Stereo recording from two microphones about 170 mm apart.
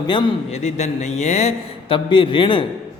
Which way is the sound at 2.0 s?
30° left (ahead or behind).